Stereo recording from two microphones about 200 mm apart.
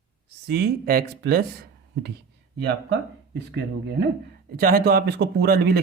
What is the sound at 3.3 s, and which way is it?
A man's voice, 55° right (ahead or behind).